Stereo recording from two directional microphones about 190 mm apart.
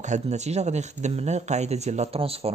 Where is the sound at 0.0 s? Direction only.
40° right (ahead or behind).